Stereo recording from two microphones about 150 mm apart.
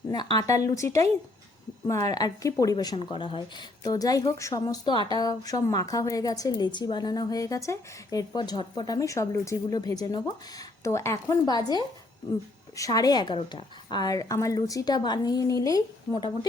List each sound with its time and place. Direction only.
0.1 s a woman's voice: 25° left (ahead or behind)
3.8 s a woman's voice: 25° left (ahead or behind)